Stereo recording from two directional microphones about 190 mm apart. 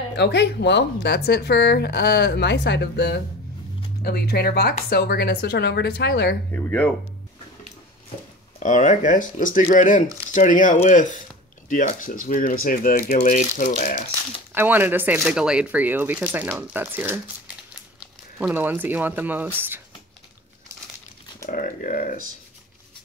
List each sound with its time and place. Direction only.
0.1 s speech: 65° left (ahead or behind)
6.5 s speech: 10° left (ahead or behind)
8.5 s speech: 40° left (ahead or behind)
14.5 s speech: 10° right (ahead or behind)
18.4 s speech: 10° right (ahead or behind)
21.5 s speech: 45° left (ahead or behind)